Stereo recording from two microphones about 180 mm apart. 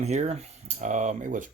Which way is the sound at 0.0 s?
40° right (ahead or behind).